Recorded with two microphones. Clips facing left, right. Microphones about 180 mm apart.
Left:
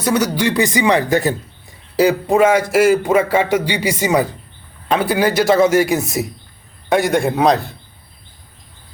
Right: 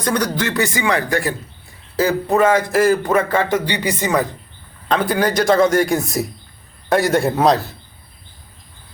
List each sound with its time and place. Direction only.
0.0 s a man's voice: 5° left (ahead or behind)